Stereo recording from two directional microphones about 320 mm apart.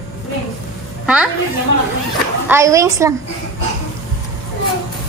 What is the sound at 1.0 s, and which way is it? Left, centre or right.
Speech, centre.